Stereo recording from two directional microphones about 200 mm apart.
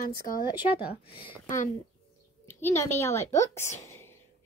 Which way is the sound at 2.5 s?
10° left (ahead or behind).